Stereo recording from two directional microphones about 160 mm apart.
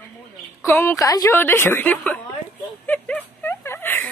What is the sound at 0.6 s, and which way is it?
Speech, 15° left (ahead or behind).